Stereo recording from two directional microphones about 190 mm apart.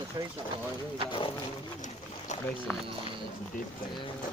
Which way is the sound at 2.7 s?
10° left (ahead or behind).